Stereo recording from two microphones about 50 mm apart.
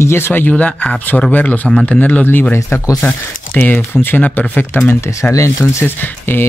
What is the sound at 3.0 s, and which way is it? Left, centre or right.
Speech, left.